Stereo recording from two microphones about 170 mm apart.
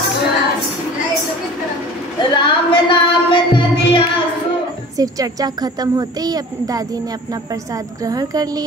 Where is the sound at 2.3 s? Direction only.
30° left (ahead or behind).